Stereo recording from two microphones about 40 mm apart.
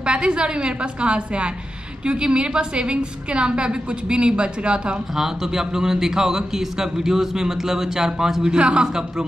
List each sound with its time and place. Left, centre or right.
0.0 s a woman's voice: right
5.1 s a man's voice: centre
8.5 s a woman's voice: right